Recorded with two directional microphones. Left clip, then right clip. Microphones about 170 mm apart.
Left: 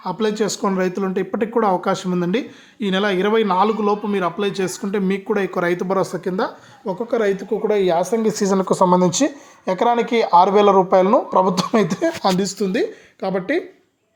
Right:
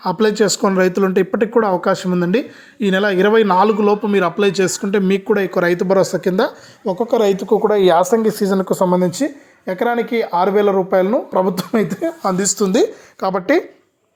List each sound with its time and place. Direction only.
0.0 s speech: 25° right (ahead or behind)
7.7 s speech: 10° right (ahead or behind)
8.4 s speech: 15° right (ahead or behind)
12.3 s speech: 10° left (ahead or behind)